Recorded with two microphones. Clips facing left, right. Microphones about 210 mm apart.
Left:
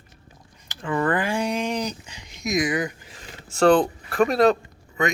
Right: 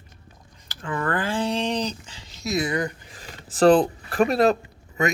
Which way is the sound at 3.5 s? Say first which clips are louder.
Right 1 dB; 35° right (ahead or behind).